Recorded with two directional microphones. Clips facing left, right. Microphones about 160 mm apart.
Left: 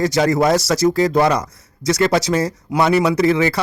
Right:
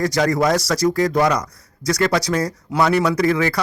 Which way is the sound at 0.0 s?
25° left (ahead or behind).